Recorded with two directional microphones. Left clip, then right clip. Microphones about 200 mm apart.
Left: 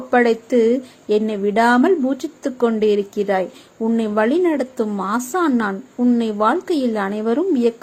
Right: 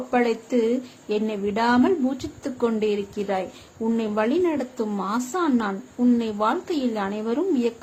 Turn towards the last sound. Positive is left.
turn(degrees=20)  # may be behind; listen again after turning